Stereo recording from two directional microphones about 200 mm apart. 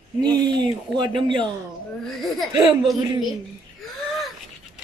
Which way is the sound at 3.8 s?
Centre (ahead or behind).